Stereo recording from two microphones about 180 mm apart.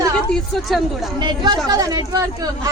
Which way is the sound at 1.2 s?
25° right (ahead or behind).